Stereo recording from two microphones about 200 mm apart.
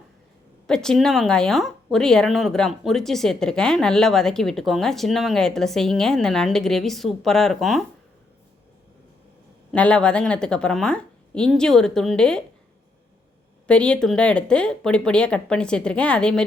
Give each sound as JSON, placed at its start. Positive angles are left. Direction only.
{"t": 0.7, "sound": "speech", "side_deg": 5}
{"t": 9.7, "sound": "speech", "side_deg": 5}
{"t": 13.7, "sound": "speech", "side_deg": 5}